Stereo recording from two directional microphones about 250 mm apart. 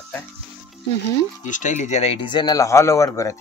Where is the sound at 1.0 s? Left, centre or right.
Left.